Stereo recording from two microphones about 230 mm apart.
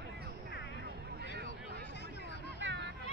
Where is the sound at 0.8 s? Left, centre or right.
Right.